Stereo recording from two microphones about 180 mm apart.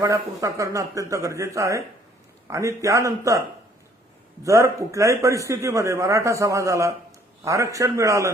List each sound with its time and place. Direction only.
0.0 s speech: 20° right (ahead or behind)
4.4 s speech: 15° right (ahead or behind)